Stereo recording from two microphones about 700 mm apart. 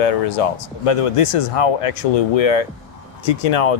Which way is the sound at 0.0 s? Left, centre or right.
Left.